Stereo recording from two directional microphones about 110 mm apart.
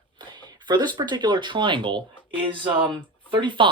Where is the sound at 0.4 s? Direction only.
40° right (ahead or behind).